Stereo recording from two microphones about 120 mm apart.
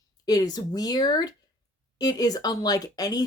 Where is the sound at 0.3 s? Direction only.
35° left (ahead or behind).